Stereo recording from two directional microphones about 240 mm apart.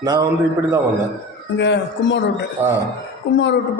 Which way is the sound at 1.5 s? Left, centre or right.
Left.